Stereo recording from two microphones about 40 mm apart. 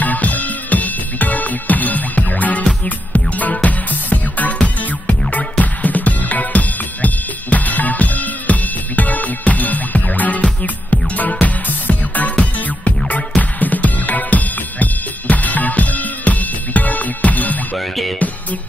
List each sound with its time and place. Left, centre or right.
0.0 s music: left
17.7 s music: centre